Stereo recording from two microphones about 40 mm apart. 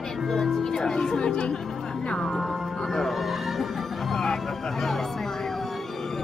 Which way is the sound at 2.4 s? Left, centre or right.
Centre.